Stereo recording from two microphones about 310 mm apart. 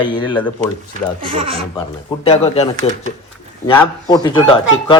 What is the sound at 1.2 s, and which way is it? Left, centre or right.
Speech, centre.